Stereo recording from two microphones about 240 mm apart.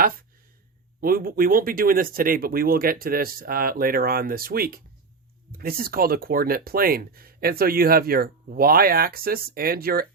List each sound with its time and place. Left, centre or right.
1.0 s speech: right